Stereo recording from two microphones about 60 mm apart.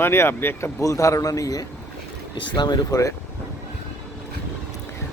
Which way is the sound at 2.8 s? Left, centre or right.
Left.